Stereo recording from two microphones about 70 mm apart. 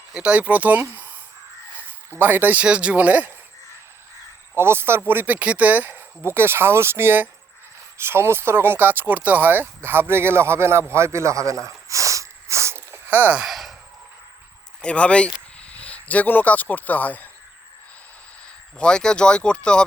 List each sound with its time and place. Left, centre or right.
0.1 s speech: centre
2.1 s speech: right
4.5 s speech: right
11.9 s a sound: right
13.4 s a sound: centre
14.8 s speech: centre
18.8 s speech: centre